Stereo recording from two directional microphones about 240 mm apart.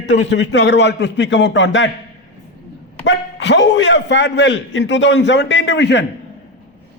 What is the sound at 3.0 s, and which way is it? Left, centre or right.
A man's voice, left.